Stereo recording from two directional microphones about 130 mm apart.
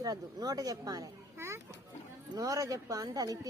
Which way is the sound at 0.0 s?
30° right (ahead or behind).